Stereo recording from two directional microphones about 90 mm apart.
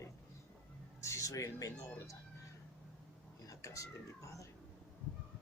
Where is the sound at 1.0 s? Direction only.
35° left (ahead or behind).